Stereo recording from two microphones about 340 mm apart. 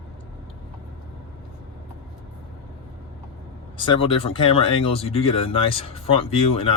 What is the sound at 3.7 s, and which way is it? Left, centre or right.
Speech, centre.